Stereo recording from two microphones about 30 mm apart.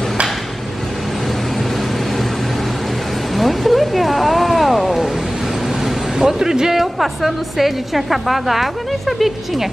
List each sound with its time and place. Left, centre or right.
3.3 s a sound: centre
6.1 s vehicle: centre
6.8 s a woman's voice: centre